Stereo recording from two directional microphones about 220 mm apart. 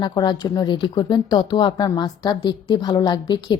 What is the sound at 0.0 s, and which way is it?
A woman's voice, 20° left (ahead or behind).